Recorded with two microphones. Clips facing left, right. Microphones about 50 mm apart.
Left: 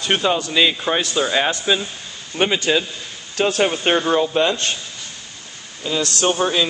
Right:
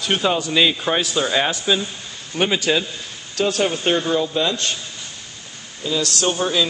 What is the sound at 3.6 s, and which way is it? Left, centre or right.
Speech, left.